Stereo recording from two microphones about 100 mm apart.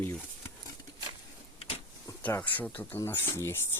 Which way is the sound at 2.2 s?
15° left (ahead or behind).